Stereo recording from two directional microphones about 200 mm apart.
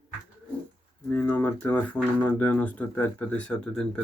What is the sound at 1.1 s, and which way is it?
Speech, 10° left (ahead or behind).